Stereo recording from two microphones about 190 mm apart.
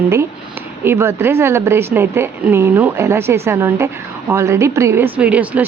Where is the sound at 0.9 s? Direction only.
10° right (ahead or behind).